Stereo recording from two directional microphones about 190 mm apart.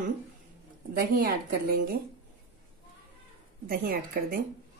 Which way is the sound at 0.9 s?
45° right (ahead or behind).